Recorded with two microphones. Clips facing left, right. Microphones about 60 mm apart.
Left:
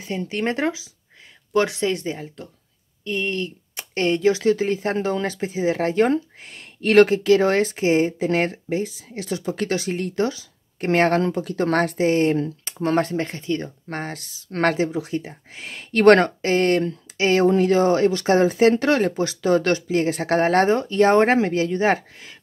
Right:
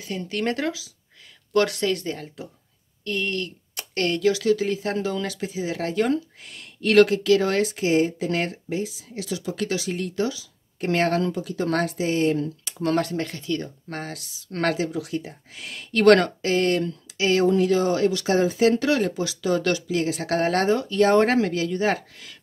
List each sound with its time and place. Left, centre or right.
0.0 s speech: left
2.4 s speech: centre
3.0 s speech: left